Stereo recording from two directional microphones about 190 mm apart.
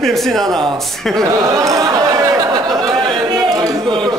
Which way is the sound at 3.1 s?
20° right (ahead or behind).